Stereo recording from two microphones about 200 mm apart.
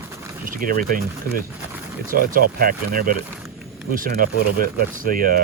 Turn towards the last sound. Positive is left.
turn(degrees=-45)  # may be behind; listen again after turning